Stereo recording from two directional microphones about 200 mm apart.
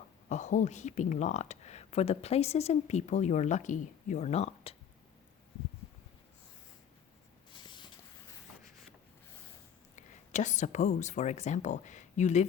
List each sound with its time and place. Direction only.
0.3 s speech: 35° left (ahead or behind)
7.5 s spray: 25° left (ahead or behind)
9.9 s speech: 35° left (ahead or behind)